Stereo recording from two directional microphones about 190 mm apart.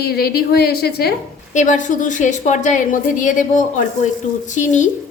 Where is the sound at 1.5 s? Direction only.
40° left (ahead or behind).